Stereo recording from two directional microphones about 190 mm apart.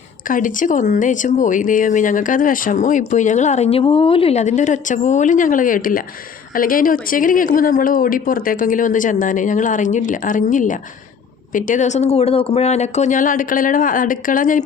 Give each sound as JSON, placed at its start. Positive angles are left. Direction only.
{"t": 0.3, "sound": "a woman's voice", "side_deg": 45}